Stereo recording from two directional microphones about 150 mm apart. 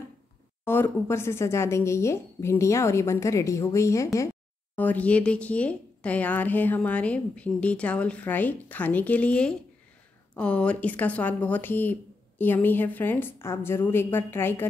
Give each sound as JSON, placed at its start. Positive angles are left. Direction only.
{"t": 0.7, "sound": "a woman's voice", "side_deg": 15}